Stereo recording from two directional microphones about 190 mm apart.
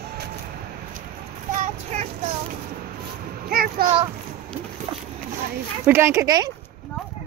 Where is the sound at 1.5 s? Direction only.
40° right (ahead or behind).